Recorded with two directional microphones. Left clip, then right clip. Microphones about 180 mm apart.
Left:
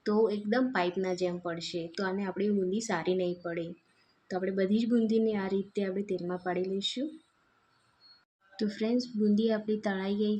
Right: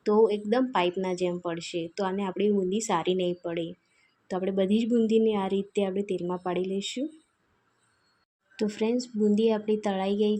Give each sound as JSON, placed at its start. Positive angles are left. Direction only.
{"t": 0.0, "sound": "speech", "side_deg": -20}
{"t": 8.5, "sound": "speech", "side_deg": -15}
{"t": 10.1, "sound": "a woman's voice", "side_deg": -40}